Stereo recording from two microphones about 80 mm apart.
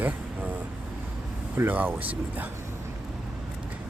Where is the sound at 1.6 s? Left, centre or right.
Right.